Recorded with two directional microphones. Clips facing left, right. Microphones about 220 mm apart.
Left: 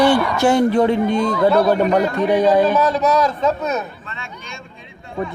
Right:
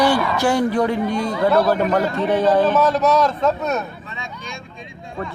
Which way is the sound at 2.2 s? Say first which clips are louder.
Left 1 dB; 15° left (ahead or behind).